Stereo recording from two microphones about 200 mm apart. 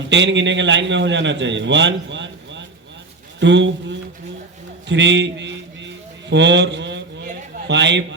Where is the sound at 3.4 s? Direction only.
65° right (ahead or behind).